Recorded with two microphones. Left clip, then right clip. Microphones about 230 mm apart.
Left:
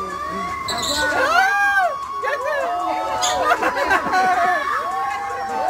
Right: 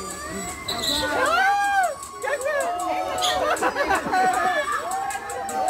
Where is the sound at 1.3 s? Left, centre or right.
Left.